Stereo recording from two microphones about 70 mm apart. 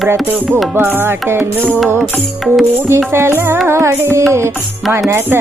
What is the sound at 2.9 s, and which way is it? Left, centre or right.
Music, right.